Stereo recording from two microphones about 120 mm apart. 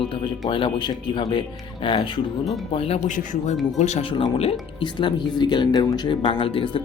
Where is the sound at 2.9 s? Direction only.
90° left.